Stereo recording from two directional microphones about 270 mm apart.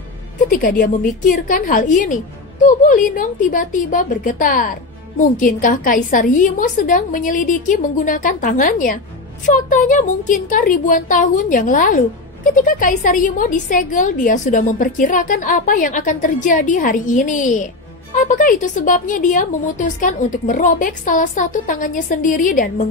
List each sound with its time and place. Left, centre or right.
0.5 s a woman's voice: left